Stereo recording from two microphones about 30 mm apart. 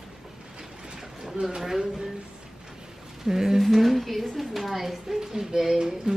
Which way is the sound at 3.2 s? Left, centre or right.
Centre.